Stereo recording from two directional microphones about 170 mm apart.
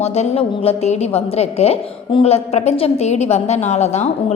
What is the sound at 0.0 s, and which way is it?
A woman's voice, 40° left (ahead or behind).